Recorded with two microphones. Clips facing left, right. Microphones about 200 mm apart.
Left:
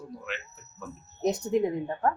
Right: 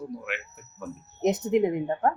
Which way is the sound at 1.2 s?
20° right (ahead or behind).